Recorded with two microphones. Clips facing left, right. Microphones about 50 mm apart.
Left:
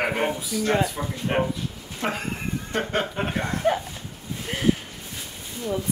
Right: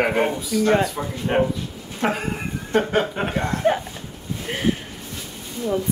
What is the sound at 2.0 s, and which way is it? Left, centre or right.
Speech, right.